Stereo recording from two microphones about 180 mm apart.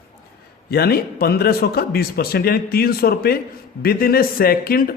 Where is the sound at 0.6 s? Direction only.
60° left (ahead or behind).